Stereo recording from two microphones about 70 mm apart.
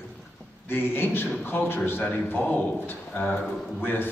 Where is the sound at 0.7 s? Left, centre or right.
Left.